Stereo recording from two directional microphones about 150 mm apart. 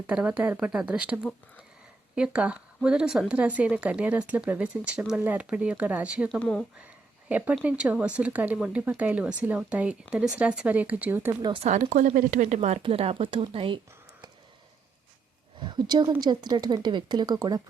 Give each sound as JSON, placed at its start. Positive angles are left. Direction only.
{"t": 0.1, "sound": "speech", "side_deg": -10}
{"t": 6.4, "sound": "speech", "side_deg": 5}
{"t": 7.3, "sound": "speech", "side_deg": -10}
{"t": 11.6, "sound": "a woman's voice", "side_deg": -50}
{"t": 15.6, "sound": "speech", "side_deg": -30}